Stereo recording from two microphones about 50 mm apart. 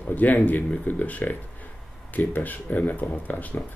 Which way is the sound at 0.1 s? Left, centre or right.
Left.